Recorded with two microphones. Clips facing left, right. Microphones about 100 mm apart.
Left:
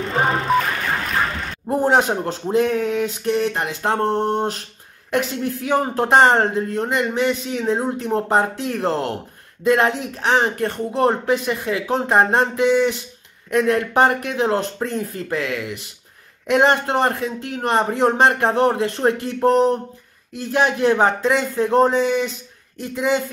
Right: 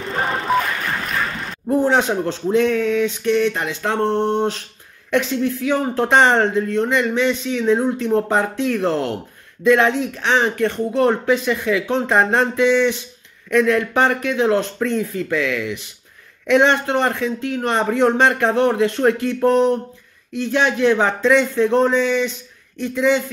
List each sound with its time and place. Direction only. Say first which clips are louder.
0.0 s music: left 3 dB; centre (ahead or behind)
1.7 s a man's voice: even; 45° left (ahead or behind)